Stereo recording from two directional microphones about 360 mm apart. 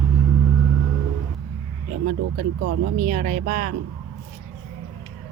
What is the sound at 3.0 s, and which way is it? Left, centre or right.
Speech, right.